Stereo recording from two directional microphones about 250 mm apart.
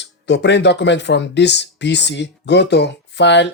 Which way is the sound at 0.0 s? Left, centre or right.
Left.